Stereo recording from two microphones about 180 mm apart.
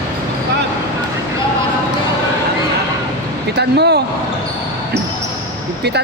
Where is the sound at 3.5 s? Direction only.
70° right (ahead or behind).